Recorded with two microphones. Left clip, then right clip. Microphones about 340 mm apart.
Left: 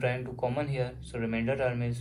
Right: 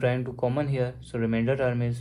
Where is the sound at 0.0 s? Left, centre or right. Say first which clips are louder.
Right 4 dB; right.